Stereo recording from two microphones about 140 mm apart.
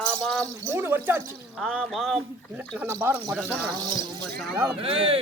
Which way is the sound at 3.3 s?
5° right (ahead or behind).